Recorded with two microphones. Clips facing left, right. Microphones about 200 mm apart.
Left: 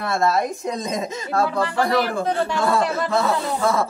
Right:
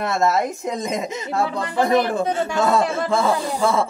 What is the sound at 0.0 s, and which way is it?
Speech, 20° right (ahead or behind).